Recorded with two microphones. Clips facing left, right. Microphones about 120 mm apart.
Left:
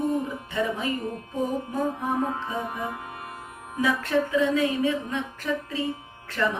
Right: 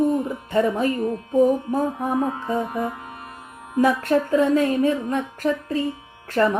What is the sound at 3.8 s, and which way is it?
Speech, 45° right (ahead or behind).